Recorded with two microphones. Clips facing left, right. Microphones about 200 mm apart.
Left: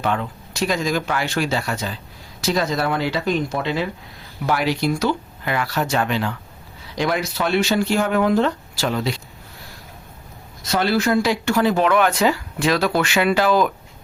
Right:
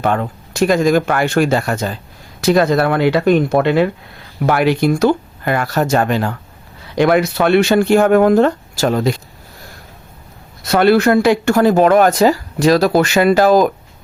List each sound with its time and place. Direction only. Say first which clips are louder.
0.0 s speech: right 6 dB; 50° right (ahead or behind)
6.9 s speech: right 9 dB; 60° right (ahead or behind)
10.6 s speech: right 8 dB; 60° right (ahead or behind); by 13.7 s 40° right (ahead or behind)